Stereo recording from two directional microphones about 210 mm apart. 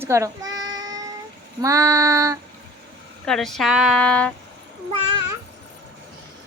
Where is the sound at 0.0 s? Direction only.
15° right (ahead or behind).